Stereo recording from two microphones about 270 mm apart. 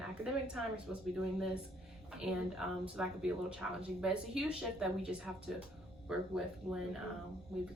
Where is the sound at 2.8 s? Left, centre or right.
Centre.